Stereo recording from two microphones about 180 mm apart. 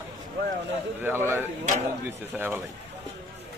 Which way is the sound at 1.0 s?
10° right (ahead or behind).